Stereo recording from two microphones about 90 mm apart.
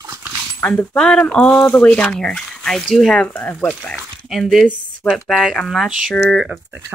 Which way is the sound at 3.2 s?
20° left (ahead or behind).